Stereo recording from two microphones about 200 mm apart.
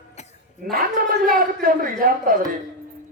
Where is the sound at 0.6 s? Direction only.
45° right (ahead or behind).